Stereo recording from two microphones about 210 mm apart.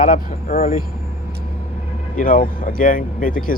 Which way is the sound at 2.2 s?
40° left (ahead or behind).